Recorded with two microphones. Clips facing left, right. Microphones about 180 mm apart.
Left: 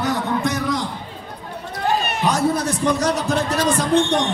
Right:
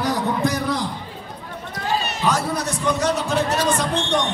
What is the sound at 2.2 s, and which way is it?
Speech, 20° left (ahead or behind).